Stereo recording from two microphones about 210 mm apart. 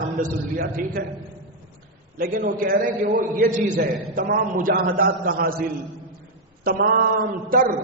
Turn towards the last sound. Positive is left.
turn(degrees=-40)  # may be behind; listen again after turning